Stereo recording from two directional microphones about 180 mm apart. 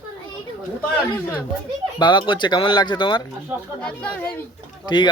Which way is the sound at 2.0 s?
25° left (ahead or behind).